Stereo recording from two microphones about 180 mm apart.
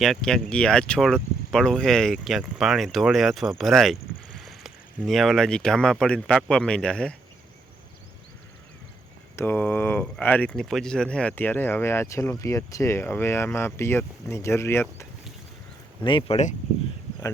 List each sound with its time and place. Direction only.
0.0 s speech: centre (ahead or behind)
9.3 s speech: 10° left (ahead or behind)
16.0 s speech: 30° left (ahead or behind)